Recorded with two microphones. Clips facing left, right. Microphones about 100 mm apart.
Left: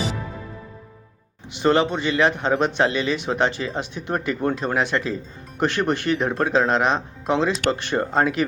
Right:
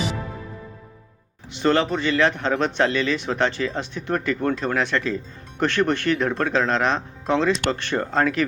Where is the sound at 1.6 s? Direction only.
15° left (ahead or behind).